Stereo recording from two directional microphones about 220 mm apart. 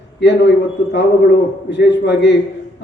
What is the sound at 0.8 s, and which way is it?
A man's voice, 55° left (ahead or behind).